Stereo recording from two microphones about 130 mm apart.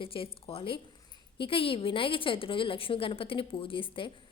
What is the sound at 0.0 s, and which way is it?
A woman's voice, 45° left (ahead or behind).